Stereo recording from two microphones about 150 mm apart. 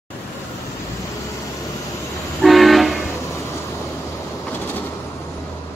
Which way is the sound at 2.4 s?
Centre (ahead or behind).